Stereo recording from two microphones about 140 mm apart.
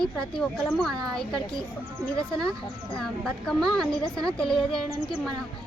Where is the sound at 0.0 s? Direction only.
5° left (ahead or behind).